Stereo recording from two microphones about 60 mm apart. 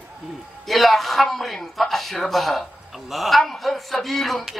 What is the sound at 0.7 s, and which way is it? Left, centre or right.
A man's voice, centre.